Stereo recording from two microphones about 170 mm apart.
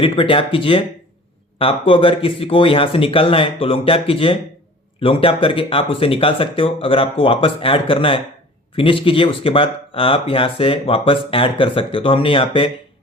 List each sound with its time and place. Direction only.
0.0 s speech: 30° left (ahead or behind)